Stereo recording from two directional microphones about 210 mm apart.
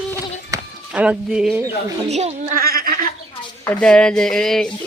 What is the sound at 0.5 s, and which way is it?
Chop, 5° right (ahead or behind).